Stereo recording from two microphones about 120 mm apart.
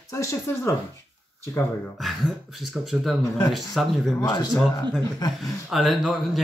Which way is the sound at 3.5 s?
Centre (ahead or behind).